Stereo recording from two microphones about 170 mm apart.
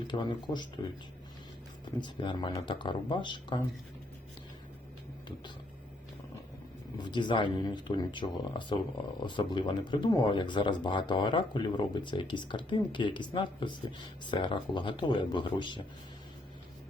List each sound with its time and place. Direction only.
0.1 s speech: 25° left (ahead or behind)
1.8 s speech: 25° left (ahead or behind)
7.0 s speech: 25° left (ahead or behind)